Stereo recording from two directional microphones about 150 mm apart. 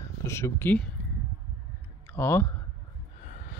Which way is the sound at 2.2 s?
15° left (ahead or behind).